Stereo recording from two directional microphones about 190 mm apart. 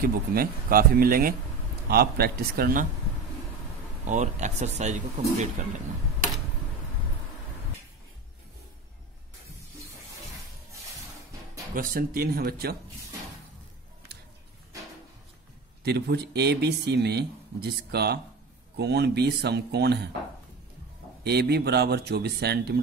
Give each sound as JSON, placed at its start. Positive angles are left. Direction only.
{"t": 0.0, "sound": "speech", "side_deg": -50}
{"t": 4.0, "sound": "speech", "side_deg": -40}
{"t": 11.7, "sound": "speech", "side_deg": -50}
{"t": 15.8, "sound": "speech", "side_deg": -60}
{"t": 21.2, "sound": "speech", "side_deg": -60}